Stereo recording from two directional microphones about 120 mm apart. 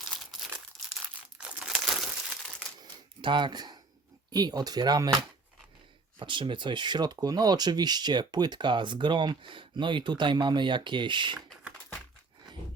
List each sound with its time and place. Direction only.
0.0 s crumpling: centre (ahead or behind)
2.8 s a sound: 40° right (ahead or behind)
4.3 s speech: 35° right (ahead or behind)
6.1 s speech: 40° right (ahead or behind)